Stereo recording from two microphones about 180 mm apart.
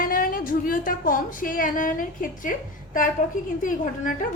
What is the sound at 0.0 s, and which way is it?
A woman's voice, 50° left (ahead or behind).